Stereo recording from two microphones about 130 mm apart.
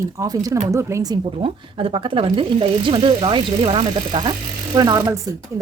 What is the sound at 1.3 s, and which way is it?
A woman's voice, 45° right (ahead or behind).